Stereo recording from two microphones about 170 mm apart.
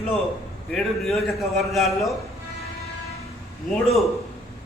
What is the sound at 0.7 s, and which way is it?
A man's voice, centre (ahead or behind).